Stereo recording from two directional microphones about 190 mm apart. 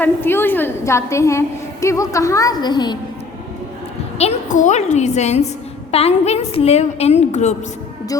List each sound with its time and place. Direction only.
0.0 s a woman's voice: 10° left (ahead or behind)
4.2 s a woman's voice: 35° left (ahead or behind)